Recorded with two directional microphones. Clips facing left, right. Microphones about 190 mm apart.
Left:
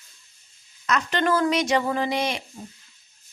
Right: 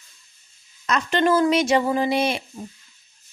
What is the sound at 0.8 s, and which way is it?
Speech, 25° right (ahead or behind).